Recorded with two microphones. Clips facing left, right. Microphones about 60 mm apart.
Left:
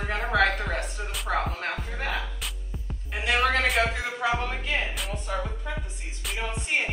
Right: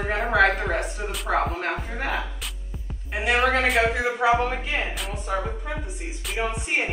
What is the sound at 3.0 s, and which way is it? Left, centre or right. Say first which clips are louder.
Speech: right 3 dB; centre.